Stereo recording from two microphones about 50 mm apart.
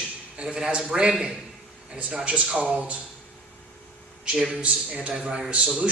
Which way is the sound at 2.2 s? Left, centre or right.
Right.